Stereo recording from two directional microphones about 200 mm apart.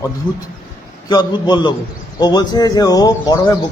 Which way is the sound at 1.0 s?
20° left (ahead or behind).